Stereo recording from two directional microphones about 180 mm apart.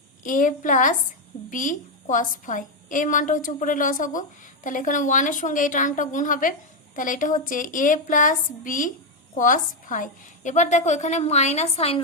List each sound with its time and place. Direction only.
0.2 s a woman's voice: 45° left (ahead or behind)